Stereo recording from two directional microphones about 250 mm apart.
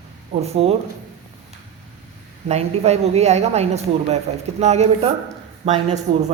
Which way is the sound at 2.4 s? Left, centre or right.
Right.